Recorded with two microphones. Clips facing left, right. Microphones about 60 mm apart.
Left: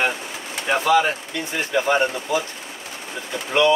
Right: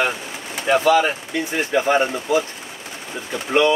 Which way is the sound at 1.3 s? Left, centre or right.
Right.